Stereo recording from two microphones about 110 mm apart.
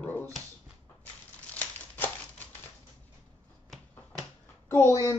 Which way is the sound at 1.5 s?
15° left (ahead or behind).